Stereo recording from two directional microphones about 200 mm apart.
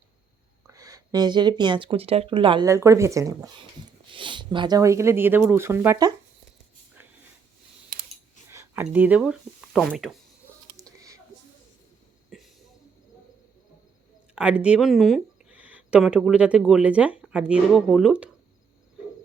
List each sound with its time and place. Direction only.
0.7 s speech: 15° right (ahead or behind)
8.4 s speech: 15° right (ahead or behind)
10.8 s whispering: 15° right (ahead or behind)
14.3 s speech: 5° right (ahead or behind)